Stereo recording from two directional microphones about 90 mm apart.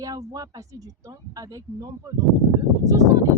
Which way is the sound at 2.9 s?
40° right (ahead or behind).